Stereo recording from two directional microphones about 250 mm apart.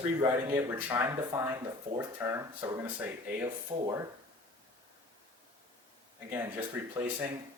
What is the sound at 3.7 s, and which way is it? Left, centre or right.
Speech, right.